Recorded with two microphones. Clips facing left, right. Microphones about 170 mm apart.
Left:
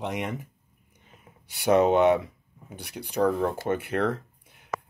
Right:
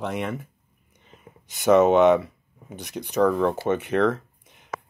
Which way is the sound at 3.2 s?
65° right (ahead or behind).